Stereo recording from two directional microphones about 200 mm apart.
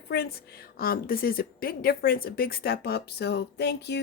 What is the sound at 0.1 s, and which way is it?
A woman's voice, 50° left (ahead or behind).